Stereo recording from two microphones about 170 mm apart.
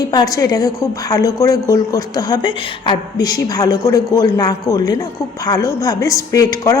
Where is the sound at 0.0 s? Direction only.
25° left (ahead or behind).